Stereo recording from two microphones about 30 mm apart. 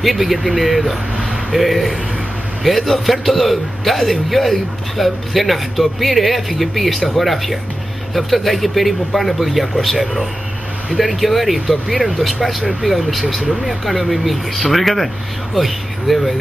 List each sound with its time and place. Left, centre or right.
0.0 s a man's voice: centre